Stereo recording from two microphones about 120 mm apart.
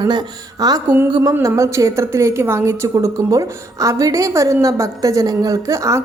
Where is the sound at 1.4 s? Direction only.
25° right (ahead or behind).